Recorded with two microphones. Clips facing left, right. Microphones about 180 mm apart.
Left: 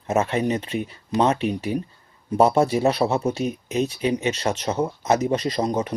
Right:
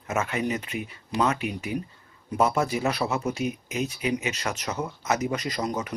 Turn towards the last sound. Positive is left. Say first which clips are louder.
# left 6 dB
turn(degrees=30)  # may be behind; listen again after turning